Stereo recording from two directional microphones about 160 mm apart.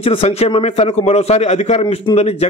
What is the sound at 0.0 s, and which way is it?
A man's voice, 40° left (ahead or behind).